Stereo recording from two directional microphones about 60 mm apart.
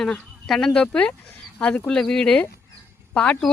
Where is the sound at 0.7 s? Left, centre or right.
Centre.